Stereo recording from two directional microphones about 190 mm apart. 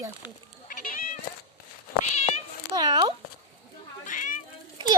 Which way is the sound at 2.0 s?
35° left (ahead or behind).